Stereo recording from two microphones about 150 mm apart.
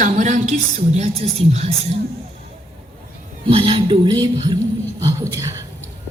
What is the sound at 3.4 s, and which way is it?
Music, 35° right (ahead or behind).